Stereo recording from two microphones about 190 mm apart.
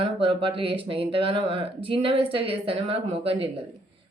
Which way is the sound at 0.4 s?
30° right (ahead or behind).